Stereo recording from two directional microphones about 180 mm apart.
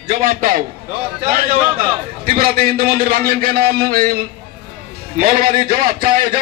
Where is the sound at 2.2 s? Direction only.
55° right (ahead or behind).